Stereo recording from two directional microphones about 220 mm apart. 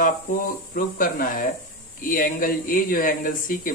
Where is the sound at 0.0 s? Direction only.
40° left (ahead or behind).